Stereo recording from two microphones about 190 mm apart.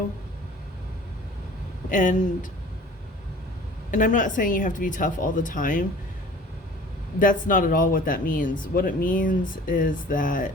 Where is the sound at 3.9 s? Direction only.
40° left (ahead or behind).